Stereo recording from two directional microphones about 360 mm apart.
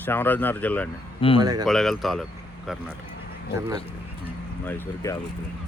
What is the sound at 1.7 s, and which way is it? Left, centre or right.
Speech, centre.